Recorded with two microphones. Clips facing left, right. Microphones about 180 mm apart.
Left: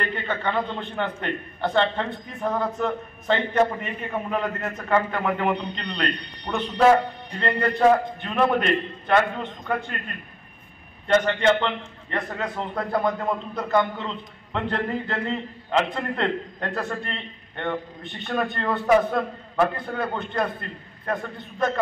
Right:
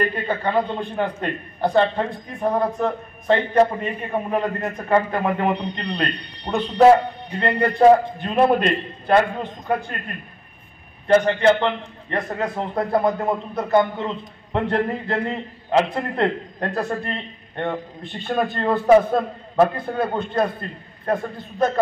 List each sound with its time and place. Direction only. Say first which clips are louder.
0.0 s a man's voice: right 4 dB; 35° right (ahead or behind)
11.1 s a man's voice: right 4 dB; 35° right (ahead or behind)